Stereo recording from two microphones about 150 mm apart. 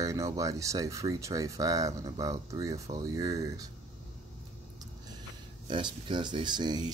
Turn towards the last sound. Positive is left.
turn(degrees=-30)  # may be behind; listen again after turning